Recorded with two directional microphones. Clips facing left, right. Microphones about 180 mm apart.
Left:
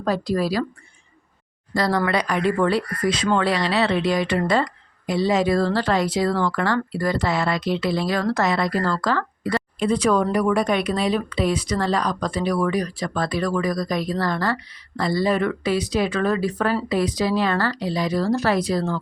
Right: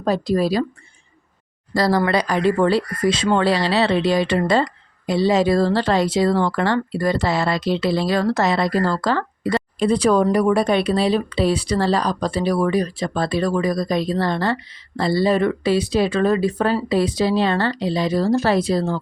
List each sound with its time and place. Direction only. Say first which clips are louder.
0.0 s speech: right 3 dB; 25° right (ahead or behind)
1.7 s speech: right 3 dB; 35° right (ahead or behind)